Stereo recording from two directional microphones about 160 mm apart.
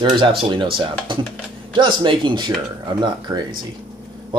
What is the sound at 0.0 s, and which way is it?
Speech, 30° right (ahead or behind).